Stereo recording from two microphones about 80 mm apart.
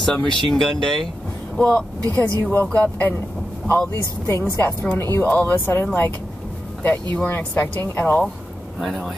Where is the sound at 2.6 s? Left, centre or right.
Centre.